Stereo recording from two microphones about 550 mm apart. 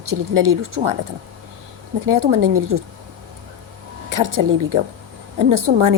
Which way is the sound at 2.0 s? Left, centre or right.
Right.